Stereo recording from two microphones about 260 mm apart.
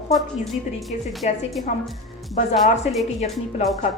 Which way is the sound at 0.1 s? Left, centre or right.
Centre.